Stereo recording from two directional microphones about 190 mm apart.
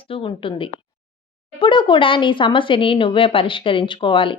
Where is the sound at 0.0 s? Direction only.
30° left (ahead or behind).